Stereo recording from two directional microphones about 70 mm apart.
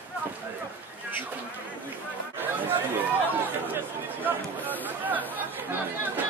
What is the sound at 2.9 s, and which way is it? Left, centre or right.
Speech, right.